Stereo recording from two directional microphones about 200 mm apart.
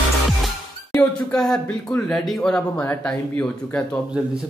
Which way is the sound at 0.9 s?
5° left (ahead or behind).